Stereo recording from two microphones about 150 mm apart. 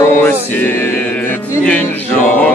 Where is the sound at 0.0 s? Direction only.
15° left (ahead or behind).